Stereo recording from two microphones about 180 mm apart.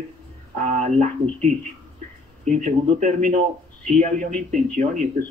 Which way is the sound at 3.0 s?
40° right (ahead or behind).